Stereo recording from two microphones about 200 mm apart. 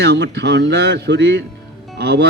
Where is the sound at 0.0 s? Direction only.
55° right (ahead or behind).